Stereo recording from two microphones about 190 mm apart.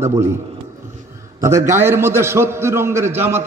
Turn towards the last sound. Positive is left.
turn(degrees=-10)  # may be behind; listen again after turning